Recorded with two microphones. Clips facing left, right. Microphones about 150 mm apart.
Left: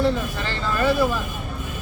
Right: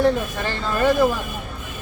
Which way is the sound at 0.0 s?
50° right (ahead or behind).